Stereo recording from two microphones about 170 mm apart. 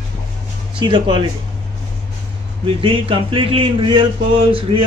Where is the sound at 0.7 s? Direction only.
30° right (ahead or behind).